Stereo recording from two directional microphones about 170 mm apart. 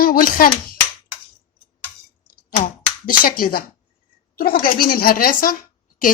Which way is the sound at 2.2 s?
55° left (ahead or behind).